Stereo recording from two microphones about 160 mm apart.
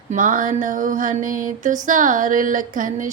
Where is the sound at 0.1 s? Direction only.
55° right (ahead or behind).